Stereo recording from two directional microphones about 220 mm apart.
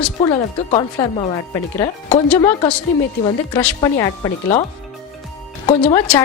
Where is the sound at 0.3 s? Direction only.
20° left (ahead or behind).